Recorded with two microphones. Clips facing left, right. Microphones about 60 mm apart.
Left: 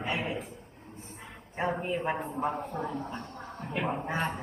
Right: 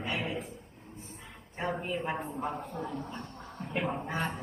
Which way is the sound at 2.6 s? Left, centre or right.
Left.